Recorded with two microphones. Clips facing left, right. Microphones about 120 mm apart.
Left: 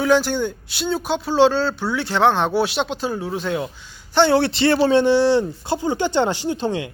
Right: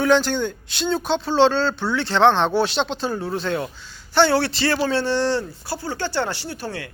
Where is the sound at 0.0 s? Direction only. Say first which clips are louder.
Left 1 dB; 10° left (ahead or behind).